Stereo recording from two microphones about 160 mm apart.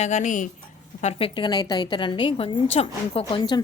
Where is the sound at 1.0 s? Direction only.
40° left (ahead or behind).